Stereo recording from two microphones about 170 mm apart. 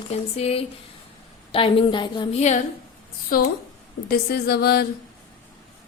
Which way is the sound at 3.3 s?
60° left (ahead or behind).